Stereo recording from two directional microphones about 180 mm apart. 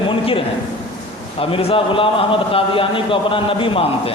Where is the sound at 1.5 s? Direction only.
30° left (ahead or behind).